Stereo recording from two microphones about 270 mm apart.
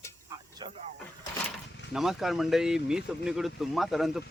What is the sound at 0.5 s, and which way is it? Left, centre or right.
Speech, centre.